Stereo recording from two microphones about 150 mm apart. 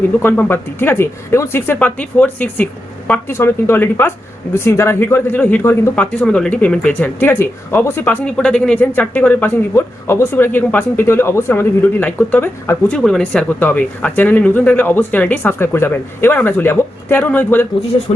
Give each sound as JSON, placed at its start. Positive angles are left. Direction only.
{"t": 0.2, "sound": "speech", "side_deg": 15}
{"t": 17.9, "sound": "speech", "side_deg": 35}